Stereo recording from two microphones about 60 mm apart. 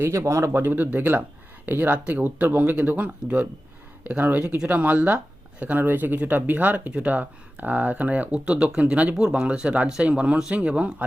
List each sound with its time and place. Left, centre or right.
0.0 s speech: right
0.5 s speech: right; by 10.9 s centre